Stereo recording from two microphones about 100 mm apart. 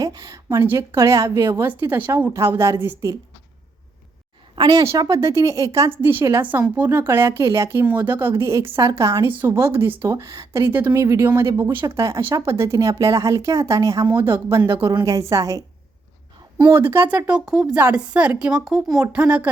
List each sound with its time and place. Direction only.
0.0 s a sound: 40° right (ahead or behind)
0.9 s speech: 30° right (ahead or behind)
4.5 s a woman's voice: 50° right (ahead or behind)
4.8 s speech: 35° right (ahead or behind)
6.0 s speech: 20° right (ahead or behind)
8.3 s speech: 30° right (ahead or behind)
9.2 s speech: 20° right (ahead or behind); by 15.6 s 35° right (ahead or behind)
16.6 s speech: 25° right (ahead or behind)
17.2 s a woman's voice: 10° right (ahead or behind)
17.7 s a woman's voice: 15° right (ahead or behind)
19.1 s a woman's voice: 15° right (ahead or behind)